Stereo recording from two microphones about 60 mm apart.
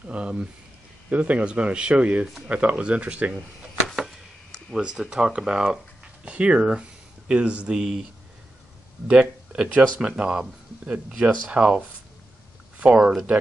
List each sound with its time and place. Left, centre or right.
0.0 s speech: right
4.7 s speech: centre
12.7 s a sound: right